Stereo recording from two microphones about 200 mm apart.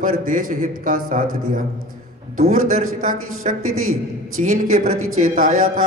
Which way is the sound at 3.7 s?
90° right.